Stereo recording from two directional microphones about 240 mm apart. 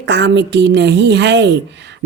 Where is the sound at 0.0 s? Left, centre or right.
Right.